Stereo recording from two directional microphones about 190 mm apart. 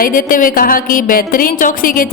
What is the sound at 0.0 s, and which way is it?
Speech, 45° left (ahead or behind).